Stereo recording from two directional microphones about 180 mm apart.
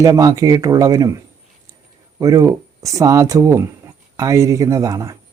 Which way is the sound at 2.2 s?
20° right (ahead or behind).